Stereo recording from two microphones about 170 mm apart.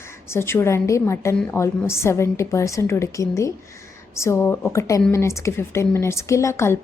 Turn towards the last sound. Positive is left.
turn(degrees=15)  # may be behind; listen again after turning